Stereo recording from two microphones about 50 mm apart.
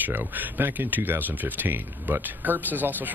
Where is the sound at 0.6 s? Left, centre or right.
Right.